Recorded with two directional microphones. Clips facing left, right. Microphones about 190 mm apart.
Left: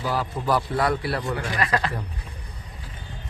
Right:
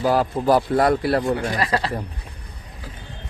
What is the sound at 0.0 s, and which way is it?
A man's voice, 45° right (ahead or behind).